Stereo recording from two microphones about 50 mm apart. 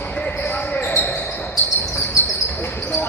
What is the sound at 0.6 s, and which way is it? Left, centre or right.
Basketball bounce, left.